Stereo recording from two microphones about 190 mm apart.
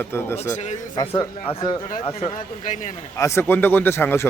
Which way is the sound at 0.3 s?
40° left (ahead or behind).